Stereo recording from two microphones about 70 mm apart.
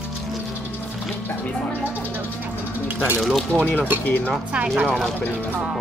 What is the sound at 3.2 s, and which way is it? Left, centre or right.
Speech, centre.